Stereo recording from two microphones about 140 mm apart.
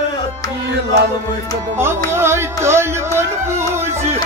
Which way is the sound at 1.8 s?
20° right (ahead or behind).